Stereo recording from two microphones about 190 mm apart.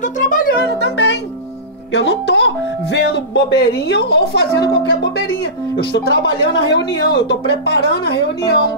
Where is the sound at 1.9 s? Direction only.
65° left (ahead or behind).